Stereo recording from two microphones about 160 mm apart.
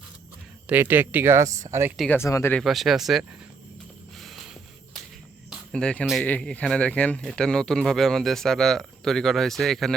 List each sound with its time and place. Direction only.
0.7 s speech: 10° right (ahead or behind)
2.0 s speech: 15° left (ahead or behind)
2.6 s speech: centre (ahead or behind)
4.2 s a sound: centre (ahead or behind)
5.5 s speech: 5° left (ahead or behind)